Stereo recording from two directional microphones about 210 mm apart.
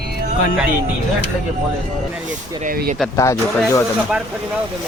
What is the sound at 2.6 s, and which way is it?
Speech, 40° right (ahead or behind).